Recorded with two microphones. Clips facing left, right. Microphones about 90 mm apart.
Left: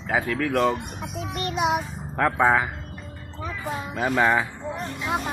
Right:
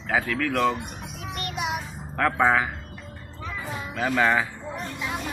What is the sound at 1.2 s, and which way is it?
Music, 25° left (ahead or behind).